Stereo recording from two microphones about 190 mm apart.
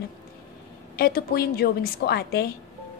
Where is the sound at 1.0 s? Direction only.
55° left (ahead or behind).